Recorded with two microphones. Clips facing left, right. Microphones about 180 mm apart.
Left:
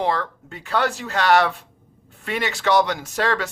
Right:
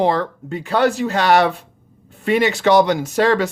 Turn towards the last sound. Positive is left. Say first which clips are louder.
# right 7 dB
turn(degrees=-15)  # may be behind; listen again after turning